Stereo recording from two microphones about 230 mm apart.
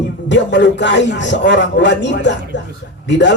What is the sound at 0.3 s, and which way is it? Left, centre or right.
A man's voice, left.